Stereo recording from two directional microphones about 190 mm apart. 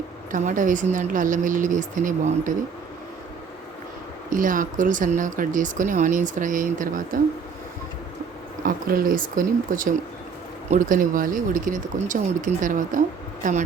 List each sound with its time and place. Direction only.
0.3 s speech: 40° right (ahead or behind)
4.3 s speech: 45° right (ahead or behind)
8.6 s speech: 45° right (ahead or behind)